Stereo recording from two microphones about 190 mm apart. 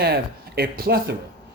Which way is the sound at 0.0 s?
55° right (ahead or behind).